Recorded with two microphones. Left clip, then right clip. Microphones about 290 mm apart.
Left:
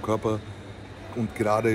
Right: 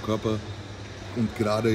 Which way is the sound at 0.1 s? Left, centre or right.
Centre.